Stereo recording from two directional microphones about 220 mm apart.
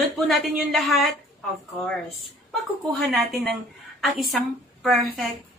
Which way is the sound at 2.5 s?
Centre (ahead or behind).